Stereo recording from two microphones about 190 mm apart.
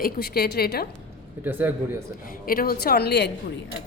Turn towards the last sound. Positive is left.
turn(degrees=60)  # may be behind; listen again after turning